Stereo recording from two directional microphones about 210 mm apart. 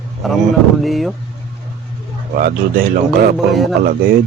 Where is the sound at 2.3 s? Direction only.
40° right (ahead or behind).